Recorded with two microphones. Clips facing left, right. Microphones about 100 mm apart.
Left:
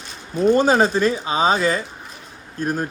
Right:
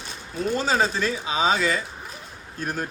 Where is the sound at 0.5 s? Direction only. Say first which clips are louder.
Left 6 dB; 55° left (ahead or behind); by 2.9 s 40° left (ahead or behind).